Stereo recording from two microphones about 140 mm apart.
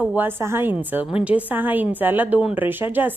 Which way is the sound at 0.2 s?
15° right (ahead or behind).